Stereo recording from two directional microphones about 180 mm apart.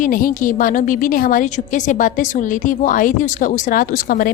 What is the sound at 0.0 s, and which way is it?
Speech, 50° left (ahead or behind).